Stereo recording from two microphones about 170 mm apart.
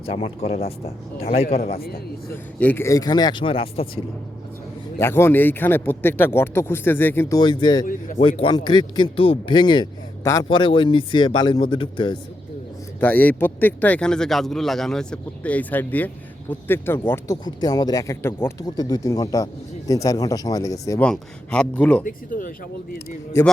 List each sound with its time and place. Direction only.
0.0 s speech: 35° left (ahead or behind)
1.7 s speech: 60° left (ahead or behind)
2.3 s a man's voice: 10° left (ahead or behind); by 4.0 s 35° left (ahead or behind)
4.9 s speech: 15° left (ahead or behind)
7.9 s speech: 50° left (ahead or behind)
8.2 s a man's voice: 30° left (ahead or behind)
13.0 s a man's voice: 10° left (ahead or behind)
21.0 s speech: 5° left (ahead or behind)
22.0 s speech: 55° left (ahead or behind)
23.3 s speech: 15° left (ahead or behind)